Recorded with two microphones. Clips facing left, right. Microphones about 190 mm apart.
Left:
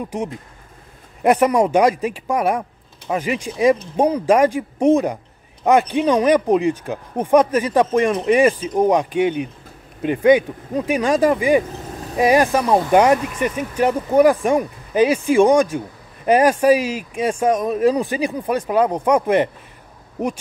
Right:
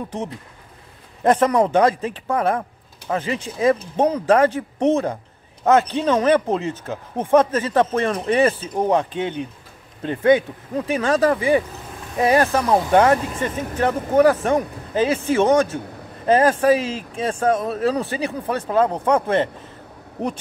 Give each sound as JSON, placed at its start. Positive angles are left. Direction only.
{"t": 0.0, "sound": "speech", "side_deg": 10}
{"t": 11.9, "sound": "vehicle", "side_deg": 40}
{"t": 12.2, "sound": "speech", "side_deg": 15}